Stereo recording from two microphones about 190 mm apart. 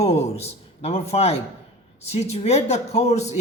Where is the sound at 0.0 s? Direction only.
35° left (ahead or behind).